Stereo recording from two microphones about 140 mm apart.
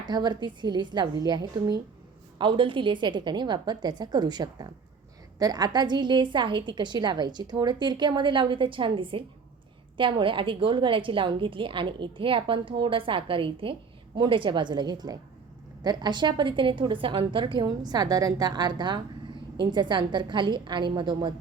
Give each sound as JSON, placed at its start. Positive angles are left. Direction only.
{"t": 0.1, "sound": "a woman's voice", "side_deg": -30}